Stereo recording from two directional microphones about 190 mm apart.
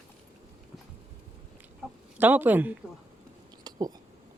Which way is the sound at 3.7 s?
20° right (ahead or behind).